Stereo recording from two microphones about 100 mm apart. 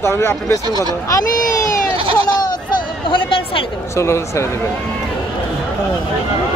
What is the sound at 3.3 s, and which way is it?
Speech, 65° left (ahead or behind).